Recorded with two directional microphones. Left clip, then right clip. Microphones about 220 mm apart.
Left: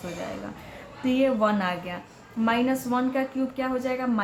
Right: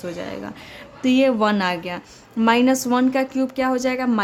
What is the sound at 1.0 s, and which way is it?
A woman's voice, 50° right (ahead or behind).